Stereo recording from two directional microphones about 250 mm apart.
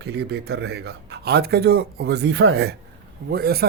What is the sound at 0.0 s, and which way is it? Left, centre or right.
Speech, right.